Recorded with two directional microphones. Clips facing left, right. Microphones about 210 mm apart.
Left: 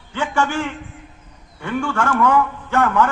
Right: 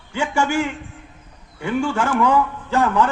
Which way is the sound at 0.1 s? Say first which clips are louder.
Right 1 dB; 10° right (ahead or behind).